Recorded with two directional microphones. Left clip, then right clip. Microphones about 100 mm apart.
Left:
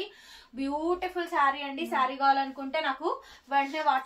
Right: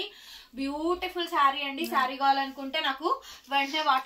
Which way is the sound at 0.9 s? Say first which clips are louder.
Right 3 dB; 10° left (ahead or behind).